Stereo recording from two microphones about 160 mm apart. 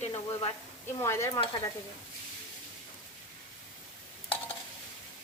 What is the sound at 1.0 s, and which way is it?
Speech, 15° left (ahead or behind).